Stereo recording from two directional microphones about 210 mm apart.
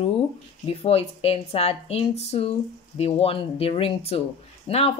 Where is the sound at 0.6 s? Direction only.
30° left (ahead or behind).